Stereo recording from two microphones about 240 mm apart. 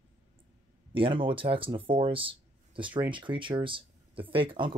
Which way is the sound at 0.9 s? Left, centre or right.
Right.